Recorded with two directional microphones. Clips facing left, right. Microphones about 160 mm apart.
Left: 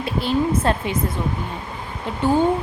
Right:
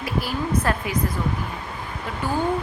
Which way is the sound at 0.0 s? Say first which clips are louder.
Left 5 dB; 25° left (ahead or behind).